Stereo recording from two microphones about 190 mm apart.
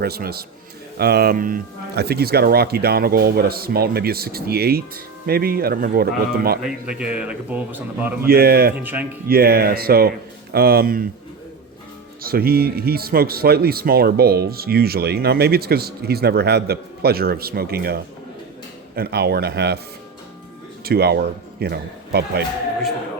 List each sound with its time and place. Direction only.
0.0 s speech: 55° right (ahead or behind)
6.6 s a man's voice: 5° right (ahead or behind)
8.3 s speech: 55° right (ahead or behind)
8.7 s a man's voice: 10° right (ahead or behind)
9.3 s speech: 55° right (ahead or behind)
12.2 s speech: 55° right (ahead or behind)
20.8 s speech: 55° right (ahead or behind)